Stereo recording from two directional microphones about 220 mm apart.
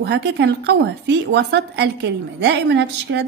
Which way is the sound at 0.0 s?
50° right (ahead or behind).